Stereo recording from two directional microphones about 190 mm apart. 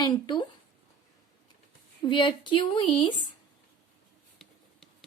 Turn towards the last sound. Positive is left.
turn(degrees=0)  # may be behind; listen again after turning